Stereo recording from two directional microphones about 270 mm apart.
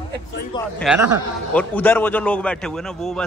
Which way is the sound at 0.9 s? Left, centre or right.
Centre.